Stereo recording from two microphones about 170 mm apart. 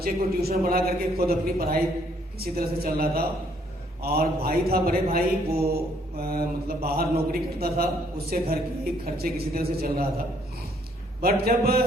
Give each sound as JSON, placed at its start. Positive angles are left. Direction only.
{"t": 0.0, "sound": "mantra", "side_deg": -65}
{"t": 11.2, "sound": "mantra", "side_deg": -65}